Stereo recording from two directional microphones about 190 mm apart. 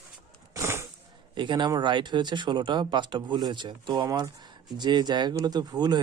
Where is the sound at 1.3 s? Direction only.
25° right (ahead or behind).